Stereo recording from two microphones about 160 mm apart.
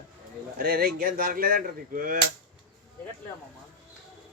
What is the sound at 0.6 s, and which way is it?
Speech, 65° right (ahead or behind).